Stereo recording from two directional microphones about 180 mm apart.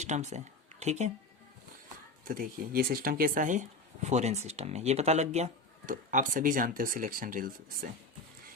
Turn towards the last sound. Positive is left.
turn(degrees=-50)  # may be behind; listen again after turning